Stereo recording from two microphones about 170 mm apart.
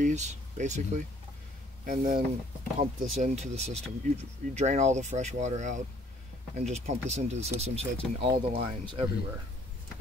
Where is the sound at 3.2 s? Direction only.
40° right (ahead or behind).